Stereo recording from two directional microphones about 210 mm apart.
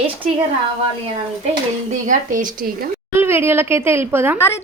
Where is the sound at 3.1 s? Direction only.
10° right (ahead or behind).